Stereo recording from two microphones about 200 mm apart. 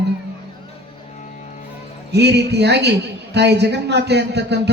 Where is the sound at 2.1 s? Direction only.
55° right (ahead or behind).